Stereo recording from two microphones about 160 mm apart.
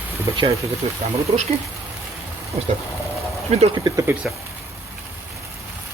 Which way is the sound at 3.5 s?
40° right (ahead or behind).